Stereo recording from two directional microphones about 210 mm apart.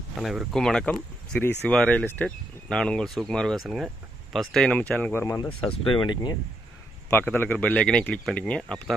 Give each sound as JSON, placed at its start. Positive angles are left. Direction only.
{"t": 0.2, "sound": "speech", "side_deg": 0}
{"t": 5.5, "sound": "speech", "side_deg": 25}
{"t": 7.1, "sound": "speech", "side_deg": 10}